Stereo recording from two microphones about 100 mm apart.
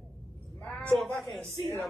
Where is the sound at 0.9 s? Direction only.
Centre (ahead or behind).